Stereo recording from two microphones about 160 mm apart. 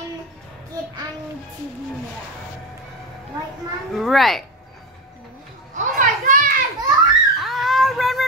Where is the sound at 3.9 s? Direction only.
Centre (ahead or behind).